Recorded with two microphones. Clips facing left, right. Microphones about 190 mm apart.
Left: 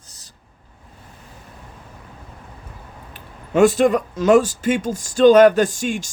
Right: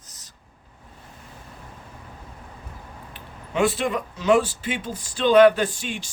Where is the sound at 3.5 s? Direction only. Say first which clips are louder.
Left 8 dB; 45° left (ahead or behind).